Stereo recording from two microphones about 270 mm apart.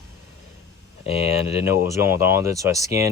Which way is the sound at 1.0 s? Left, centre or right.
Left.